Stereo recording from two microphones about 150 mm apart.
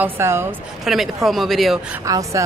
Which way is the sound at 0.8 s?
Centre (ahead or behind).